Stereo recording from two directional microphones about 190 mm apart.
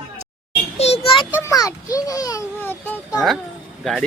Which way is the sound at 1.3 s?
15° left (ahead or behind).